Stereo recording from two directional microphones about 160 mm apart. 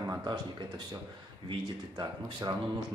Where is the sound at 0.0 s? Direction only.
25° right (ahead or behind).